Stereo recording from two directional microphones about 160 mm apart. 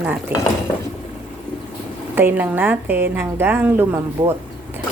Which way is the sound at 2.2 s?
10° right (ahead or behind).